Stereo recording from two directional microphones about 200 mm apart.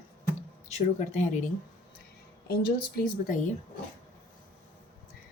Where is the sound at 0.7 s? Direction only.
35° left (ahead or behind).